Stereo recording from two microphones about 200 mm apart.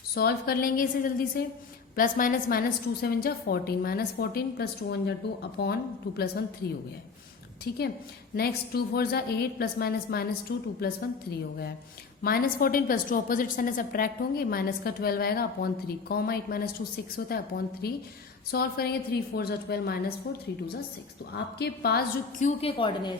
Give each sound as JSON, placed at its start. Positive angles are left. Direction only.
{"t": 0.1, "sound": "a woman's voice", "side_deg": 50}
{"t": 8.4, "sound": "a woman's voice", "side_deg": 50}
{"t": 12.2, "sound": "a woman's voice", "side_deg": 50}
{"t": 21.3, "sound": "a woman's voice", "side_deg": 55}
{"t": 22.4, "sound": "a woman's voice", "side_deg": 35}
{"t": 22.8, "sound": "a woman's voice", "side_deg": 25}